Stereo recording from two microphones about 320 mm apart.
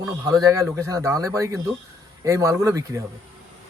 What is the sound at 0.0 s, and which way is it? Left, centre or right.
Speech, centre.